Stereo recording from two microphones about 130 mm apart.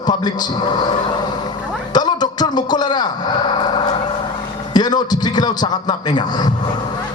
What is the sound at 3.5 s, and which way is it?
A man's voice, 40° left (ahead or behind).